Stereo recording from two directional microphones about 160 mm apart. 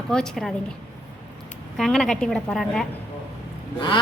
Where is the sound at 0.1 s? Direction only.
5° left (ahead or behind).